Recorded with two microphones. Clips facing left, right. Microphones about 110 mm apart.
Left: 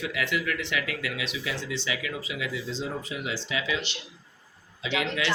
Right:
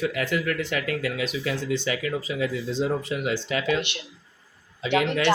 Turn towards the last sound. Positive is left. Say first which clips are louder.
# right 6 dB
turn(degrees=-55)  # may be behind; listen again after turning